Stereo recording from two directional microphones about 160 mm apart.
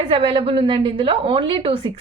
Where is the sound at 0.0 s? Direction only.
35° right (ahead or behind).